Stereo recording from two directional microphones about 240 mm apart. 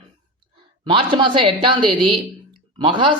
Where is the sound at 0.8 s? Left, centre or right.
Centre.